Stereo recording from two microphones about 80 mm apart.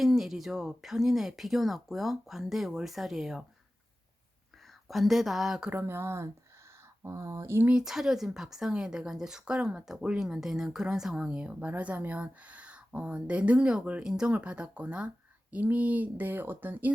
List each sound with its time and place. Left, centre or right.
0.0 s speech: centre
4.9 s speech: centre
5.7 s speech: right
7.7 s speech: centre; by 16.9 s right